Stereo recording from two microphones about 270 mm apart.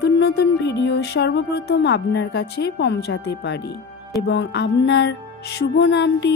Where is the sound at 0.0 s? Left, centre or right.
Left.